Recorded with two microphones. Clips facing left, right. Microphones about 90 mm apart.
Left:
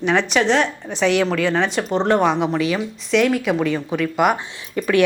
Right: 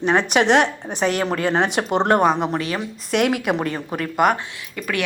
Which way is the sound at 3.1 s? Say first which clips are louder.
Left 2 dB; 65° right (ahead or behind).